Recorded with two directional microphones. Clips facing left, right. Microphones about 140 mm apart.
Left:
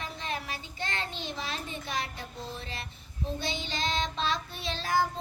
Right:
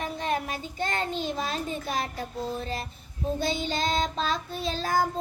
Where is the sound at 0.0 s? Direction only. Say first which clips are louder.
Right 7 dB; 50° right (ahead or behind).